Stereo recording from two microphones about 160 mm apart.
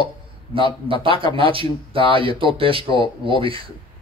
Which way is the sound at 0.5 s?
35° right (ahead or behind).